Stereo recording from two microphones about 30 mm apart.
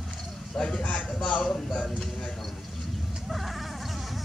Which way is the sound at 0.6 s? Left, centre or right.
Left.